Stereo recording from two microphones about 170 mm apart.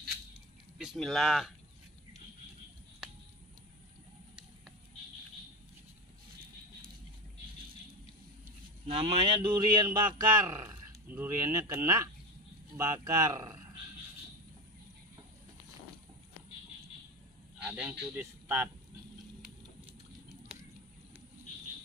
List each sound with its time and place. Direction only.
0.7 s speech: centre (ahead or behind)
8.8 s a man's voice: 35° right (ahead or behind); by 13.6 s 20° right (ahead or behind)
17.6 s speech: 10° right (ahead or behind)
20.5 s a sound: 5° right (ahead or behind)